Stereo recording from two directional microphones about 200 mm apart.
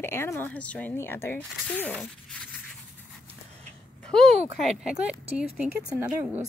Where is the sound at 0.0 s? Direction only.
10° left (ahead or behind).